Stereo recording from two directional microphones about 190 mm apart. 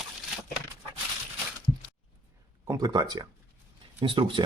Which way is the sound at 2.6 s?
20° right (ahead or behind).